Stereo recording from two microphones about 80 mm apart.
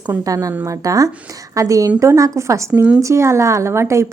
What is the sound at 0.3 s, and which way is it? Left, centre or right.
A woman's voice, right.